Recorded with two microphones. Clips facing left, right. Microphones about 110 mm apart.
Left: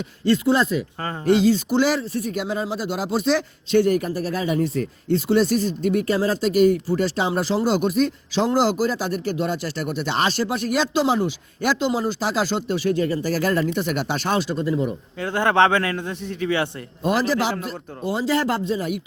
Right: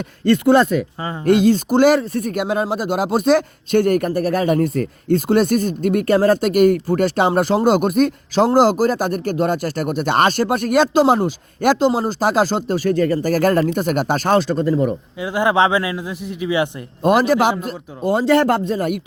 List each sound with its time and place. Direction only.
0.3 s a man's voice: 55° right (ahead or behind)
15.2 s speech: 10° right (ahead or behind)
17.0 s a man's voice: 55° right (ahead or behind)